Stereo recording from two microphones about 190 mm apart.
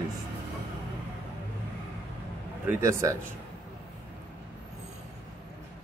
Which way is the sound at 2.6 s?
15° right (ahead or behind).